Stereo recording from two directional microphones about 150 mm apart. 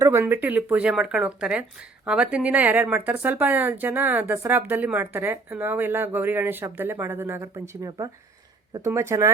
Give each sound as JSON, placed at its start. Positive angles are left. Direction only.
{"t": 0.0, "sound": "speech", "side_deg": -15}